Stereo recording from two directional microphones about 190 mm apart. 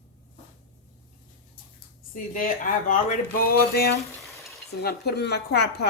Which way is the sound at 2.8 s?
45° left (ahead or behind).